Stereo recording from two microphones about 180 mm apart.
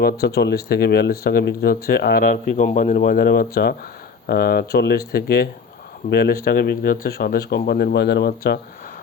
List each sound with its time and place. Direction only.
0.0 s speech: 65° left (ahead or behind)
2.2 s speech: 50° left (ahead or behind); by 8.5 s 65° left (ahead or behind)